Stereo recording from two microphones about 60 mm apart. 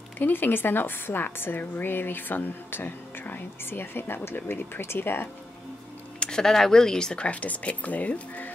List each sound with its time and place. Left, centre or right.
0.2 s a woman's voice: left
6.1 s speech: centre